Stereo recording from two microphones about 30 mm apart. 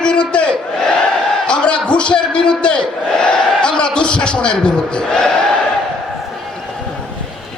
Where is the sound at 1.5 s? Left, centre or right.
Left.